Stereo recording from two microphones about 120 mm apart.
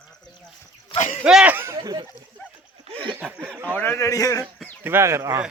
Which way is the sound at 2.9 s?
45° right (ahead or behind).